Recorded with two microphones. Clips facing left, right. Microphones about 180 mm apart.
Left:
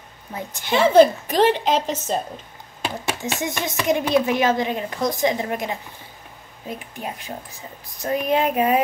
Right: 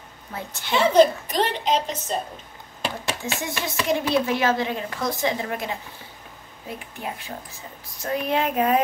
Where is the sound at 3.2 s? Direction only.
20° left (ahead or behind).